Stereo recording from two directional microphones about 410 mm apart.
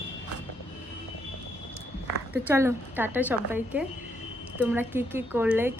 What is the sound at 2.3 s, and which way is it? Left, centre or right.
Speech, centre.